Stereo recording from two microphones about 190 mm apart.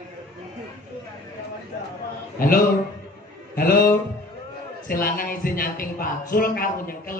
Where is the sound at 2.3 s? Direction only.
50° left (ahead or behind).